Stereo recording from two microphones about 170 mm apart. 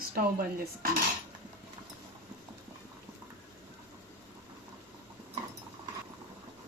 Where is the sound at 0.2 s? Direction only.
60° right (ahead or behind).